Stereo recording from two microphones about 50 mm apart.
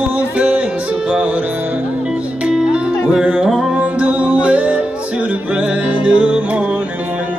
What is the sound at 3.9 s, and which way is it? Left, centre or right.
Music, right.